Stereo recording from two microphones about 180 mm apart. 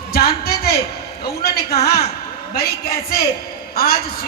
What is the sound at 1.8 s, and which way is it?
Speech, 60° left (ahead or behind).